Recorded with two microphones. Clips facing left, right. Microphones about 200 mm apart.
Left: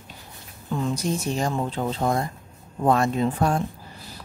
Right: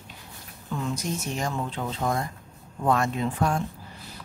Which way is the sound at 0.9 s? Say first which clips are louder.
Left 5 dB; 35° left (ahead or behind).